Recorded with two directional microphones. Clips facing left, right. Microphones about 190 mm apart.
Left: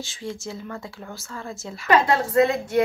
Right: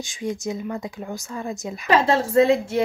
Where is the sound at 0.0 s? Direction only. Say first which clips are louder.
Right 5 dB; 15° right (ahead or behind).